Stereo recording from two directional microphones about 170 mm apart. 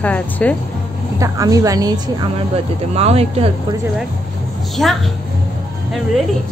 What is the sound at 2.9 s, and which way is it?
Speech, 35° right (ahead or behind).